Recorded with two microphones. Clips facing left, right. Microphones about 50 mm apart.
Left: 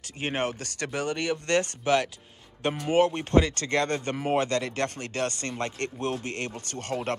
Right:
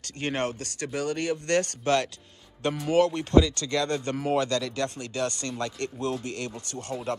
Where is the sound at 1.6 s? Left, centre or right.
Left.